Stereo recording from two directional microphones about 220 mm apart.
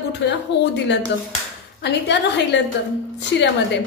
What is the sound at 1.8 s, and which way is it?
Speech, 50° left (ahead or behind).